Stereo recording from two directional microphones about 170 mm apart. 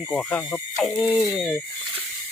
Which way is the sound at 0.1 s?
5° left (ahead or behind).